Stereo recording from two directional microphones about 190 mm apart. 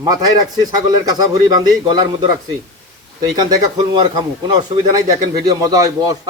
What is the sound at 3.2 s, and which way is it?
A man's voice, 20° right (ahead or behind).